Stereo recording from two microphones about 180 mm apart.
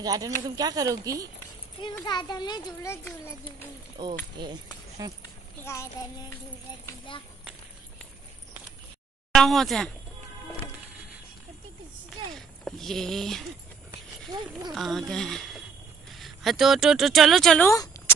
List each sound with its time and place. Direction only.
0.0 s speech: 20° right (ahead or behind)
2.0 s a child's voice: 25° left (ahead or behind)
5.6 s a child's voice: 15° left (ahead or behind)
6.9 s a child's voice: 25° left (ahead or behind)
9.3 s speech: centre (ahead or behind)
12.4 s speech: centre (ahead or behind)
14.7 s speech: centre (ahead or behind)
17.6 s speech: 20° left (ahead or behind)